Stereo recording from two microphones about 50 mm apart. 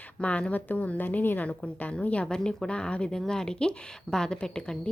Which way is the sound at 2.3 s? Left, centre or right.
Centre.